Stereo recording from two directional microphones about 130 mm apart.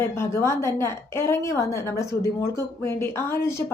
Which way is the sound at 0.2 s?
20° left (ahead or behind).